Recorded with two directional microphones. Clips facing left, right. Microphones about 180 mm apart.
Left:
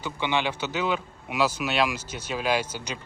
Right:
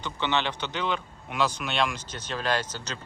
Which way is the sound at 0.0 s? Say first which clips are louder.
Left 1 dB; 10° left (ahead or behind).